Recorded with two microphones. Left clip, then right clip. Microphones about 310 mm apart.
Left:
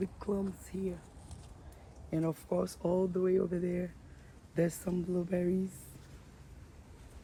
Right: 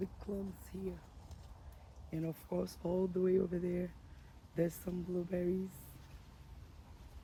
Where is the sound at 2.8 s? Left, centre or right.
Left.